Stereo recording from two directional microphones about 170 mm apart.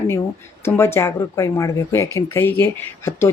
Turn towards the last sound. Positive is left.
turn(degrees=15)  # may be behind; listen again after turning